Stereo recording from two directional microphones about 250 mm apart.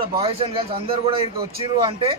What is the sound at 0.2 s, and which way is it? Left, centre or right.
A man's voice, right.